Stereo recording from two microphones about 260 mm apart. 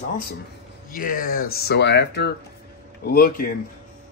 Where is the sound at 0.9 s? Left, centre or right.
Left.